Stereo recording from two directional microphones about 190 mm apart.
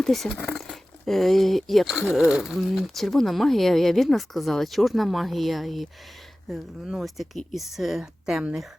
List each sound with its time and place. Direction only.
0.0 s speech: centre (ahead or behind)